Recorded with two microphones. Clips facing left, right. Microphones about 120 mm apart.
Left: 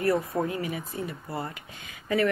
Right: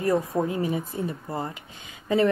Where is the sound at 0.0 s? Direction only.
20° right (ahead or behind).